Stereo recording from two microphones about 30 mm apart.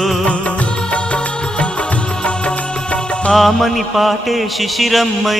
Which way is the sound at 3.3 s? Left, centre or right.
Centre.